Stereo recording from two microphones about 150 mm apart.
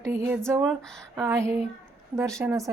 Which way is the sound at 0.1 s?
20° right (ahead or behind).